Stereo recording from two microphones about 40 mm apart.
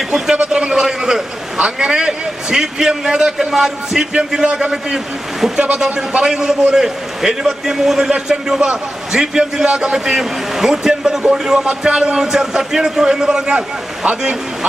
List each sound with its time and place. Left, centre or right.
0.1 s a man's voice: centre
0.5 s a sound: right
1.5 s a man's voice: right
5.7 s a man's voice: right
13.5 s speech: right